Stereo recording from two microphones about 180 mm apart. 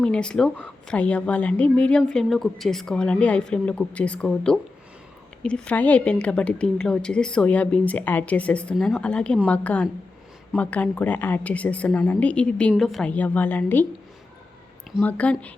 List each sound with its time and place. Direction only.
0.0 s a woman's voice: 5° left (ahead or behind)
15.0 s a woman's voice: 10° left (ahead or behind)